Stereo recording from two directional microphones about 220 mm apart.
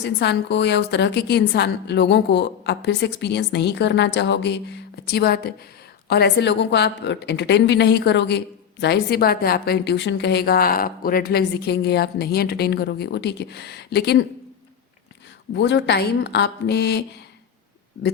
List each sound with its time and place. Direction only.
0.0 s a woman's voice: 50° left (ahead or behind)
15.5 s a woman's voice: 50° left (ahead or behind)